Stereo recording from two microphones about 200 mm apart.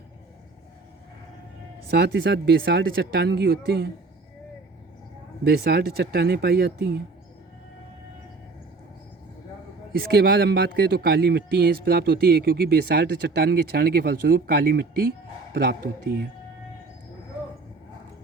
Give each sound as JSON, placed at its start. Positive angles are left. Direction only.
{"t": 1.9, "sound": "speech", "side_deg": -55}
{"t": 5.5, "sound": "speech", "side_deg": -55}
{"t": 9.9, "sound": "speech", "side_deg": -50}